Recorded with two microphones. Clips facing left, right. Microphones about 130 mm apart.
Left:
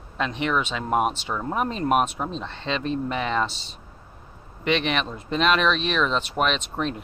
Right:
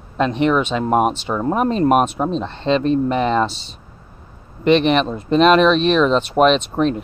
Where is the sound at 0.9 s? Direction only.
45° right (ahead or behind).